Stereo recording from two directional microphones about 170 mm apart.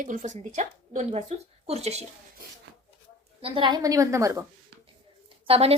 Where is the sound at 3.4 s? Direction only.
30° right (ahead or behind).